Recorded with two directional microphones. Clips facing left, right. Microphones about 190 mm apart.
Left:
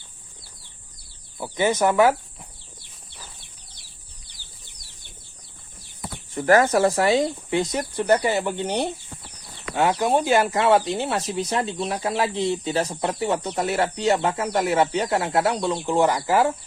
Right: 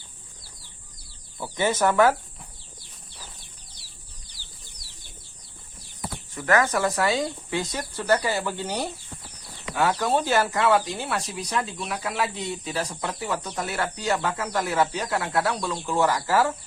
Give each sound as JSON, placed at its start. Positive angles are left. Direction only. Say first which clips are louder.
{"t": 1.4, "sound": "speech", "louder": "left 3 dB", "side_deg": 15}
{"t": 6.3, "sound": "speech", "louder": "left 5 dB", "side_deg": 30}
{"t": 10.5, "sound": "speech", "louder": "left 3 dB", "side_deg": 25}